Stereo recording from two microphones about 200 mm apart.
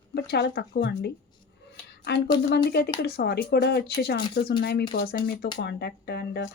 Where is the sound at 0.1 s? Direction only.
60° left (ahead or behind).